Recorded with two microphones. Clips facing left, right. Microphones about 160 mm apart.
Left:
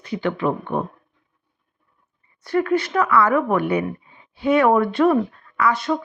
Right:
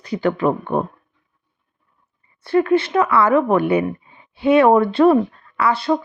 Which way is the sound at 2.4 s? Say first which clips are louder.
Right 4 dB; 30° right (ahead or behind).